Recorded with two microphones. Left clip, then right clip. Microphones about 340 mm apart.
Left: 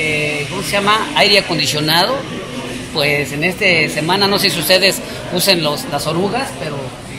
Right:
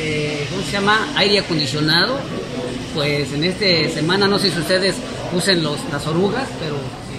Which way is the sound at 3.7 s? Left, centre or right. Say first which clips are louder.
Left 3 dB; centre.